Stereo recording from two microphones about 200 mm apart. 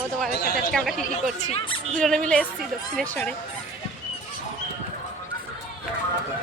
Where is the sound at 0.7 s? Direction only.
Centre (ahead or behind).